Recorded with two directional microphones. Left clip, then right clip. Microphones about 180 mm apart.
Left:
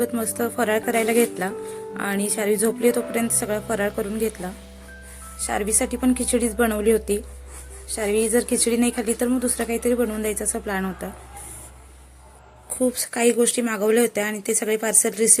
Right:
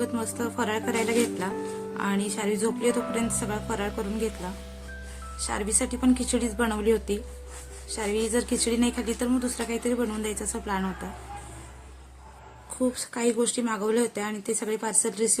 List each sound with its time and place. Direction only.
0.0 s a woman's voice: 15° left (ahead or behind)
5.4 s a woman's voice: 15° left (ahead or behind)
12.9 s a woman's voice: 15° left (ahead or behind)